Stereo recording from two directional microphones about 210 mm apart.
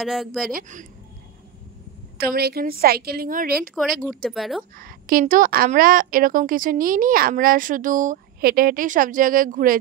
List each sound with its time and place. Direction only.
0.0 s speech: centre (ahead or behind)
0.6 s a woman's voice: 35° right (ahead or behind)
2.1 s a woman's voice: 50° right (ahead or behind)
3.8 s speech: centre (ahead or behind)
4.7 s a woman's voice: 40° right (ahead or behind)